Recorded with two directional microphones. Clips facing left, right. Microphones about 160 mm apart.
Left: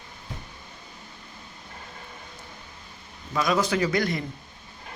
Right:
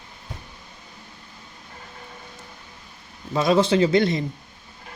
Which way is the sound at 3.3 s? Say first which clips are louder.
Right 5 dB; 30° right (ahead or behind).